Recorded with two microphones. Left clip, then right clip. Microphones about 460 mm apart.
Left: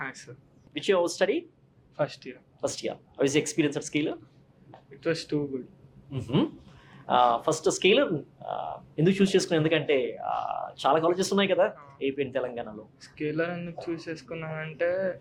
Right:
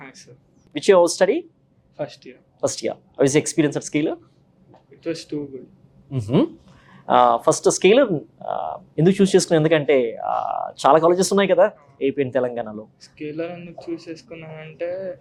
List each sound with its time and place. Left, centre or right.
0.0 s a sound: left
0.7 s speech: right
2.0 s speech: centre
2.6 s speech: right
5.0 s speech: centre
6.1 s speech: right
13.0 s speech: centre